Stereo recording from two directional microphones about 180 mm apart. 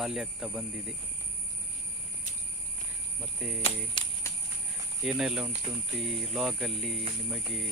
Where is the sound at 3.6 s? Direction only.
35° left (ahead or behind).